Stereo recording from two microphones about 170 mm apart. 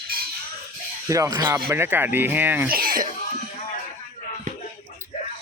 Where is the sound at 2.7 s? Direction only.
60° right (ahead or behind).